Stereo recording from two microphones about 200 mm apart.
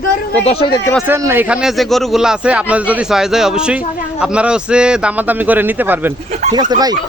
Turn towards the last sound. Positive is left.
turn(degrees=-20)  # may be behind; listen again after turning